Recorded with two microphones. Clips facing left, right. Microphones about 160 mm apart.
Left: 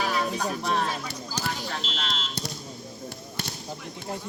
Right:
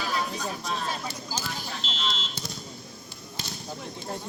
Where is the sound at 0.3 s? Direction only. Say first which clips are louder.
Left 5 dB; 65° left (ahead or behind).